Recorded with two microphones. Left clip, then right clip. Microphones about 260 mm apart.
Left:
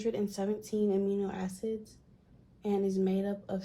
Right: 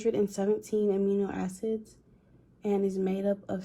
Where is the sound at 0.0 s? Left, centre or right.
Right.